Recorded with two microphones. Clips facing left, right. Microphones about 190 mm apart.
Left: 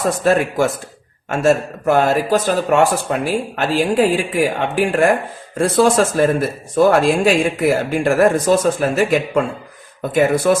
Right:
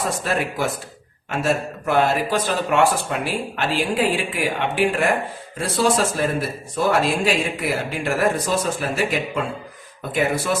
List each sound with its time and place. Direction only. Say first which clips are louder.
0.0 s speech: left 8 dB; 45° left (ahead or behind)